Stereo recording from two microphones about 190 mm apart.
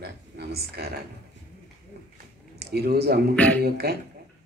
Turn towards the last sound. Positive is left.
turn(degrees=-55)  # may be behind; listen again after turning